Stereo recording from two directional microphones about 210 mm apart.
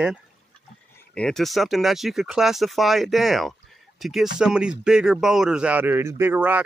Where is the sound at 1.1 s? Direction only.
5° left (ahead or behind).